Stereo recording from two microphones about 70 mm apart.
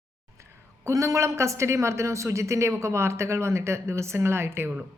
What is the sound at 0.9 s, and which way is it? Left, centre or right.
A woman's voice, right.